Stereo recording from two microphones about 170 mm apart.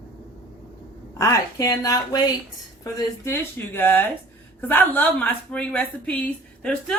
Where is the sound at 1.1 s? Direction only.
20° left (ahead or behind).